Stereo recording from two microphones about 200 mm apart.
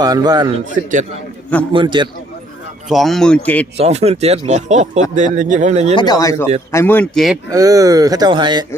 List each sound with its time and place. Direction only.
0.0 s a man's voice: 20° right (ahead or behind)
1.7 s a man's voice: 25° right (ahead or behind)
2.9 s a man's voice: centre (ahead or behind)
3.8 s speech: 30° right (ahead or behind)
5.9 s speech: 20° left (ahead or behind); by 7.3 s centre (ahead or behind)
7.5 s speech: 15° right (ahead or behind)